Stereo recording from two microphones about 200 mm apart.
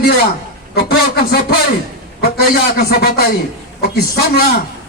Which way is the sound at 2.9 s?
50° left (ahead or behind).